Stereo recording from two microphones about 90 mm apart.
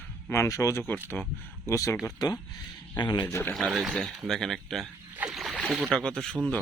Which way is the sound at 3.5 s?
Centre (ahead or behind).